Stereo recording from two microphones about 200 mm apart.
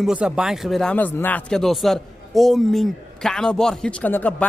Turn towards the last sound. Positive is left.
turn(degrees=10)  # may be behind; listen again after turning